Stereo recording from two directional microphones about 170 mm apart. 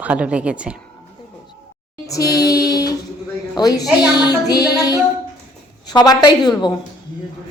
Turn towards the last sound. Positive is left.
turn(degrees=25)  # may be behind; listen again after turning